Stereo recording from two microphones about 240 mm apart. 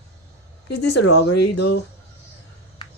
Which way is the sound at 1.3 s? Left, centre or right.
Left.